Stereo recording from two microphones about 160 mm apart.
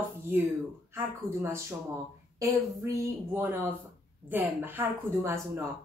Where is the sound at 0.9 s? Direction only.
15° right (ahead or behind).